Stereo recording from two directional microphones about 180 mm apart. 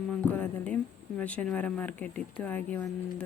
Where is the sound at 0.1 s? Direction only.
5° left (ahead or behind).